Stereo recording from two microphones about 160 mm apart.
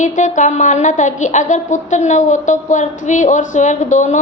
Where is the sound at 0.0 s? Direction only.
50° left (ahead or behind).